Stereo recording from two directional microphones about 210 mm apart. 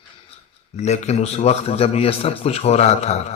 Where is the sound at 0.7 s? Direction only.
30° left (ahead or behind).